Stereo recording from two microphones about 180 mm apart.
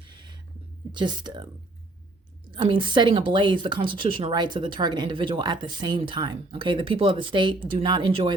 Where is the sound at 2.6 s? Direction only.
25° right (ahead or behind).